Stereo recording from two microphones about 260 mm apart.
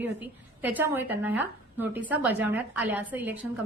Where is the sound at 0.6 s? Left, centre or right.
Centre.